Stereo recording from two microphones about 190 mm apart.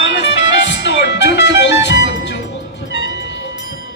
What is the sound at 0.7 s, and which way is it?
Music, 65° left (ahead or behind).